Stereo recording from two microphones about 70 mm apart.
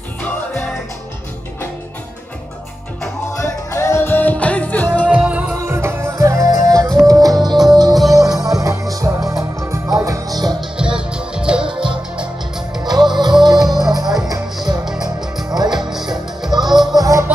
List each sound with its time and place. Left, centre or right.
3.3 s music: left
4.1 s music: left
5.0 s music: centre
5.7 s music: right
6.1 s music: right
7.6 s music: right
8.5 s music: right
10.6 s music: centre
12.8 s music: right
14.0 s music: centre
15.5 s music: right
15.9 s music: centre
16.4 s music: right
16.9 s music: right